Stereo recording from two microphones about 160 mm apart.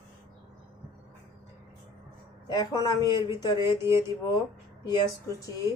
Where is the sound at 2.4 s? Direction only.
25° left (ahead or behind).